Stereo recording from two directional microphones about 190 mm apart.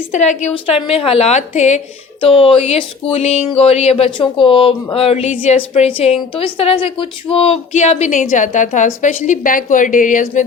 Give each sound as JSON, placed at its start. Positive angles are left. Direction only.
{"t": 0.1, "sound": "speech", "side_deg": 40}